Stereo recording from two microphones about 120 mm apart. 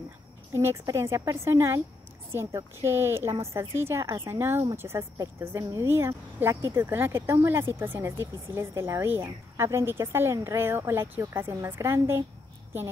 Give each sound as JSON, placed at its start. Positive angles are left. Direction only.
{"t": 0.5, "sound": "speech", "side_deg": -25}